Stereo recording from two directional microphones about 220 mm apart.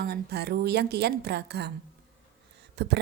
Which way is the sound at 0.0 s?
45° right (ahead or behind).